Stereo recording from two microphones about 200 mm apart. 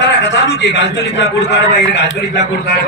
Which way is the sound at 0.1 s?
60° left (ahead or behind).